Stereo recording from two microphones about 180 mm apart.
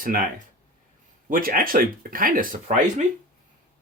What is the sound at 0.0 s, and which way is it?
Speech, 50° right (ahead or behind).